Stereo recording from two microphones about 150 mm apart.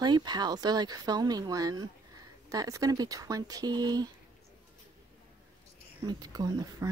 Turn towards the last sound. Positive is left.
turn(degrees=-25)  # may be behind; listen again after turning